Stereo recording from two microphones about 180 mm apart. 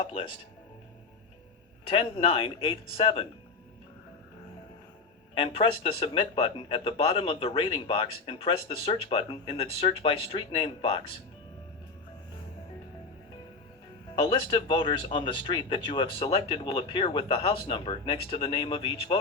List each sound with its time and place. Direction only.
0.0 s speech: 30° left (ahead or behind)
1.9 s speech: 30° left (ahead or behind)
5.3 s speech: 30° left (ahead or behind)
14.2 s speech: 25° left (ahead or behind)